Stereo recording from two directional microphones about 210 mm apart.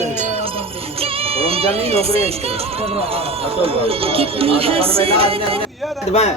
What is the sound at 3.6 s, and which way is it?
Speech, 25° right (ahead or behind).